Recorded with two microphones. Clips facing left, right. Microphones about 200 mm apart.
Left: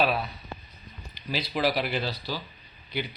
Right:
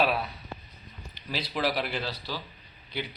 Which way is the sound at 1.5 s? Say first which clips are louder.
Left 3 dB; 5° left (ahead or behind).